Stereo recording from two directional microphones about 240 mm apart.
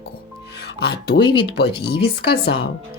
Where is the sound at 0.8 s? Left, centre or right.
Left.